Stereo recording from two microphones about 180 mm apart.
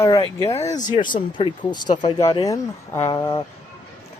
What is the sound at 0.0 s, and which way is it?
Speech, 20° left (ahead or behind).